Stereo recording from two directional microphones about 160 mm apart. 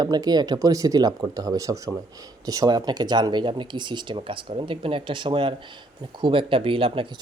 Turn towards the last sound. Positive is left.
turn(degrees=-35)  # may be behind; listen again after turning